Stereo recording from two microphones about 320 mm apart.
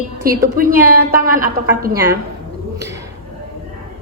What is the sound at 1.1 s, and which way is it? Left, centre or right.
Speech, right.